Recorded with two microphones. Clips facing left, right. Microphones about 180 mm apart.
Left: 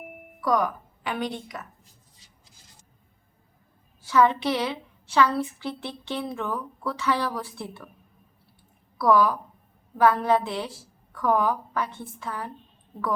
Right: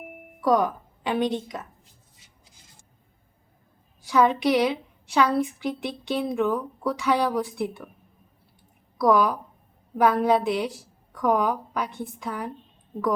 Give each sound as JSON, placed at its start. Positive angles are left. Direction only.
{"t": 0.4, "sound": "speech", "side_deg": -25}
{"t": 4.0, "sound": "a woman's voice", "side_deg": -15}
{"t": 9.0, "sound": "a woman's voice", "side_deg": -15}